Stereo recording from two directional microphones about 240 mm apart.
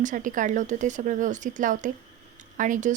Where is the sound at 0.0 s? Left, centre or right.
Right.